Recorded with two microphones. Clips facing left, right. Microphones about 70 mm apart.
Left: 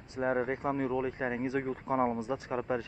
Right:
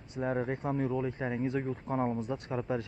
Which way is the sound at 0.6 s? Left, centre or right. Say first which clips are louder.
Left 1 dB; left.